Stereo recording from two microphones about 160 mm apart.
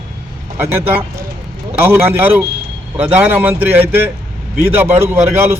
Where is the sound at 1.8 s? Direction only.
10° right (ahead or behind).